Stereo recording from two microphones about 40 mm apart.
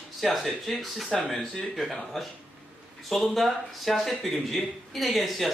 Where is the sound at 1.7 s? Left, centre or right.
Centre.